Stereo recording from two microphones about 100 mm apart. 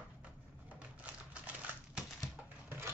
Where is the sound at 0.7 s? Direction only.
15° right (ahead or behind).